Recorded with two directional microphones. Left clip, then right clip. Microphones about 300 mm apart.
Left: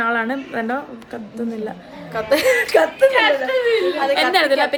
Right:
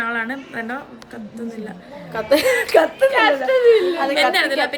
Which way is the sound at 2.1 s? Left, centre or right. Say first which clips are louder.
Even; centre.